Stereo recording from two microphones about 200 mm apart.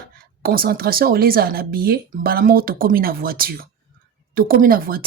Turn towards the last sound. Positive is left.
turn(degrees=-45)  # may be behind; listen again after turning